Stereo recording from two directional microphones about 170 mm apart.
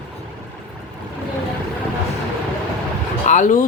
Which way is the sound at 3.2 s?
45° left (ahead or behind).